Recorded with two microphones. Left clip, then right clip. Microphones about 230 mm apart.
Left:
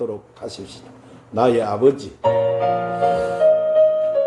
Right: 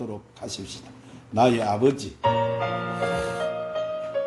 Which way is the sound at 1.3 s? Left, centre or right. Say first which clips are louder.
Left 3 dB; right.